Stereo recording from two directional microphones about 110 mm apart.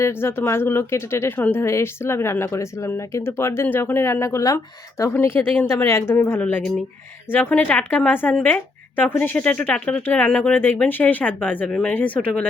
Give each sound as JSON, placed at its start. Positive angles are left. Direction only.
{"t": 0.0, "sound": "speech", "side_deg": 20}